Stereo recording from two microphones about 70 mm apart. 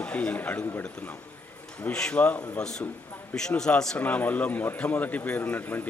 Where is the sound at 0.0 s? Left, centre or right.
Left.